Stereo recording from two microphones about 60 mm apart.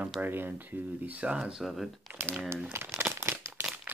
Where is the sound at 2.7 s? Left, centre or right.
Right.